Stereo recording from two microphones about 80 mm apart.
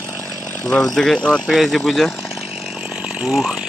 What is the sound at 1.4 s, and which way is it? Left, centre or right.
Speech, centre.